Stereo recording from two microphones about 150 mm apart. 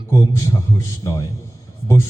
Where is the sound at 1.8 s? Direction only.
20° left (ahead or behind).